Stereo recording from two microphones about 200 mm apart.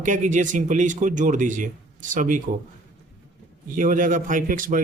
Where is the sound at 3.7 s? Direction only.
40° right (ahead or behind).